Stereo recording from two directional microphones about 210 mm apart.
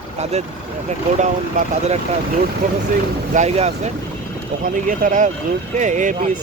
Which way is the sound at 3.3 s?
30° right (ahead or behind).